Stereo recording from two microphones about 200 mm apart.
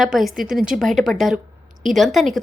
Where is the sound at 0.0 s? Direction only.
Centre (ahead or behind).